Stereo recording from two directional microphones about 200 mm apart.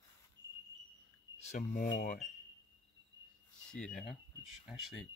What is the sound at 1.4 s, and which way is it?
Speech, 35° left (ahead or behind).